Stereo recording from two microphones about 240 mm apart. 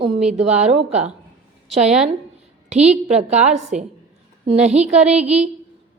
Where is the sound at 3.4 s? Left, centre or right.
Right.